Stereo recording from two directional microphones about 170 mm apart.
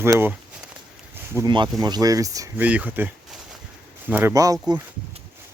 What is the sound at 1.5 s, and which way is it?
Speech, 25° right (ahead or behind).